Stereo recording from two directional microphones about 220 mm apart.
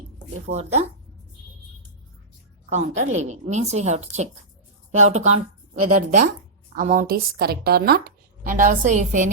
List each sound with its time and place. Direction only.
0.4 s speech: 30° right (ahead or behind)
2.6 s a woman's voice: 30° right (ahead or behind)